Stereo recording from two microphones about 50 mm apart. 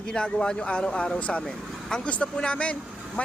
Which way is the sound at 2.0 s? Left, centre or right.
Left.